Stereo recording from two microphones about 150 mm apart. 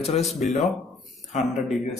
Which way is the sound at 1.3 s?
55° left (ahead or behind).